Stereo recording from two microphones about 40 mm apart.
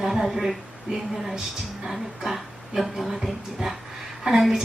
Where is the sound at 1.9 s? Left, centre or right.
Centre.